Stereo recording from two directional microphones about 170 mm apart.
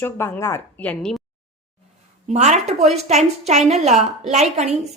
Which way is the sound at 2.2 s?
45° right (ahead or behind).